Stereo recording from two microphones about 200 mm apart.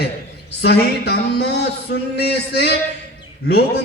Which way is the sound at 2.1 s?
55° left (ahead or behind).